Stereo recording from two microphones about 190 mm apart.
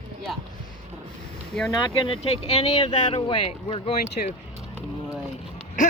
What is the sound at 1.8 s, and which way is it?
Speech, 25° left (ahead or behind).